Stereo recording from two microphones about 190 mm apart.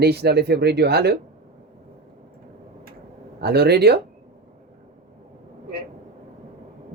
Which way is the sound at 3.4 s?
60° right (ahead or behind).